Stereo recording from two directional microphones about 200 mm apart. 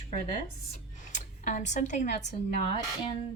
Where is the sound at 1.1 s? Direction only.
40° left (ahead or behind).